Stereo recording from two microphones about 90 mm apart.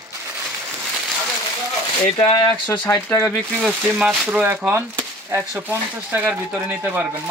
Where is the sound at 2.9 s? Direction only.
35° left (ahead or behind).